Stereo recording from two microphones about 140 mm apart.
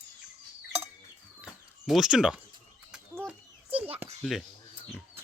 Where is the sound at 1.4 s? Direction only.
5° right (ahead or behind).